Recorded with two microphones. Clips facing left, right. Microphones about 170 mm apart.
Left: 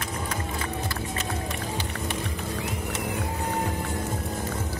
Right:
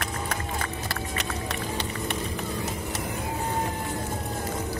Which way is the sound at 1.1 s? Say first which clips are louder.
Even; 70° right (ahead or behind).